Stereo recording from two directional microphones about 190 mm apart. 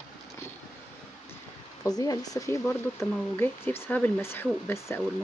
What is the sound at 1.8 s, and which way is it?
Speech, 20° left (ahead or behind).